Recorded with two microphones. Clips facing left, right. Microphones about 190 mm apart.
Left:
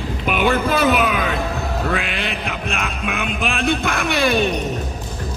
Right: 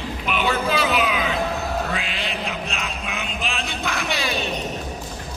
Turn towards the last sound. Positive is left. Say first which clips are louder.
# left 8 dB
turn(degrees=55)  # may be behind; listen again after turning